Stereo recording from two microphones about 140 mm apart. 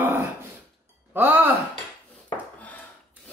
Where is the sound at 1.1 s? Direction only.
15° right (ahead or behind).